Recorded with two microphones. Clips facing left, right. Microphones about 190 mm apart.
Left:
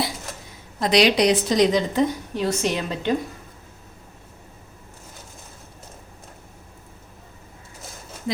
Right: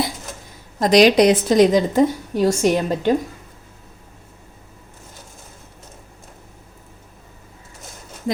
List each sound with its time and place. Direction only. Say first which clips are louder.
0.8 s a woman's voice: right 5 dB; 45° right (ahead or behind)